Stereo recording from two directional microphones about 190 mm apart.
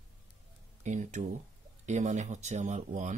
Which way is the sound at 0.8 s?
40° right (ahead or behind).